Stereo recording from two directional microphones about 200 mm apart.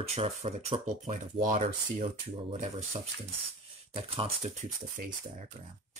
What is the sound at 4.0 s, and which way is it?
Speech, 30° right (ahead or behind).